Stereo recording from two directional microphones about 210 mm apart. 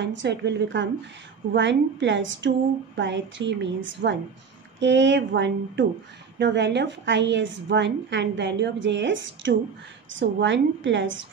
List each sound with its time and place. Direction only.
0.0 s a woman's voice: 60° right (ahead or behind)